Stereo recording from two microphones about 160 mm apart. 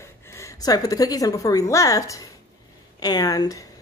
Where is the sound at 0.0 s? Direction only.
20° left (ahead or behind).